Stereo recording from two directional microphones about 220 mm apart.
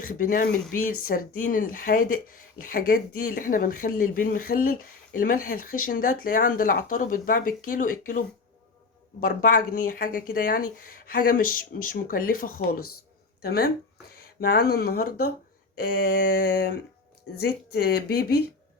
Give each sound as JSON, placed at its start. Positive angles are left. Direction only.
{"t": 0.0, "sound": "speech", "side_deg": 40}
{"t": 9.2, "sound": "speech", "side_deg": 40}